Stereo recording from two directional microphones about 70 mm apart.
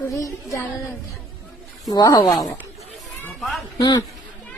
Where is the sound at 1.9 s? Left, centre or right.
Left.